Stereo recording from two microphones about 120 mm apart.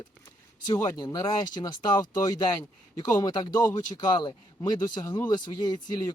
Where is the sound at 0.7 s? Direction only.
35° left (ahead or behind).